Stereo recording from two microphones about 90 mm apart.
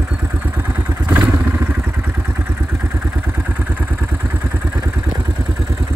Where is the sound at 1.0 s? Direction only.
20° right (ahead or behind).